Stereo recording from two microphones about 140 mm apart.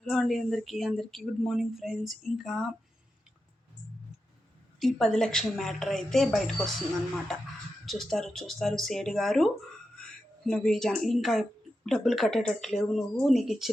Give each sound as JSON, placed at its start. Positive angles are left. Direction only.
{"t": 0.0, "sound": "speech", "side_deg": 0}
{"t": 4.8, "sound": "speech", "side_deg": 0}
{"t": 7.9, "sound": "speech", "side_deg": 0}